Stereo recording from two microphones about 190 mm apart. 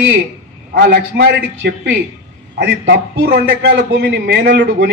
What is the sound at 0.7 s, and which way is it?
A man's voice, 60° right (ahead or behind).